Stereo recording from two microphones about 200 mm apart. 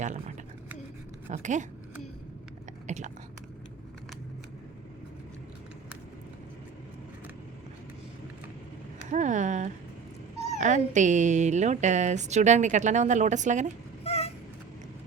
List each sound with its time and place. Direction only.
0.0 s a woman's voice: 35° right (ahead or behind)
2.8 s chewing: 35° right (ahead or behind)
9.0 s a sound: 40° right (ahead or behind)
10.6 s a woman's voice: 40° right (ahead or behind)
14.0 s vehicle: 30° left (ahead or behind)